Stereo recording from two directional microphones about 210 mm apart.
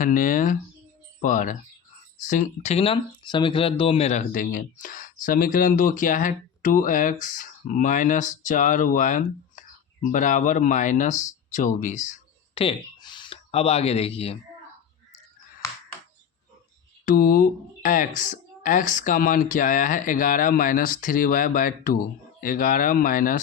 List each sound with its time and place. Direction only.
0.0 s speech: 40° left (ahead or behind)
12.5 s speech: 25° left (ahead or behind)
17.1 s speech: 40° left (ahead or behind)